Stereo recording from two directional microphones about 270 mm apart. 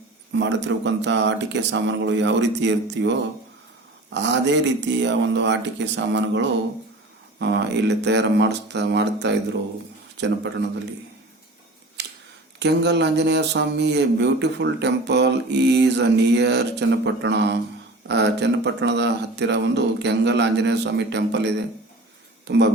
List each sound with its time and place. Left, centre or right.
0.3 s speech: right
12.0 s camera: right
12.5 s speech: right